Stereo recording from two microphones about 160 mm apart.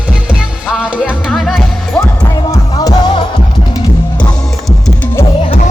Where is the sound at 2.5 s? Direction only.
25° left (ahead or behind).